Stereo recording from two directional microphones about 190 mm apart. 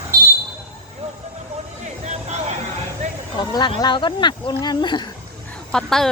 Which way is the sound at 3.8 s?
25° left (ahead or behind).